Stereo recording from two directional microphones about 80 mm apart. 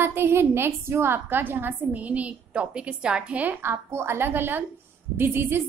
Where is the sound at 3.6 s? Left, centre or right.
Right.